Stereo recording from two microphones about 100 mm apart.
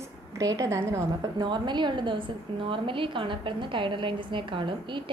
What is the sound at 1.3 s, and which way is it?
A woman's voice, 50° right (ahead or behind).